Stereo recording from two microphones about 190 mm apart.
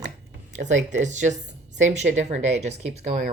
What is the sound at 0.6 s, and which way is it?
Speech, 40° right (ahead or behind).